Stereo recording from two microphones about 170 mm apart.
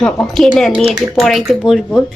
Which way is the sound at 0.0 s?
5° left (ahead or behind).